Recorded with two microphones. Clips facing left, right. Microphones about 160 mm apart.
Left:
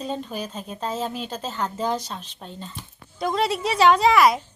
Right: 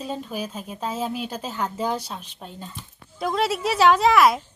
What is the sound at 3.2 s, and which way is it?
A woman's voice, centre (ahead or behind).